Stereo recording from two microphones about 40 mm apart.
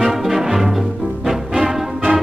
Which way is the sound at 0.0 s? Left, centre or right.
Centre.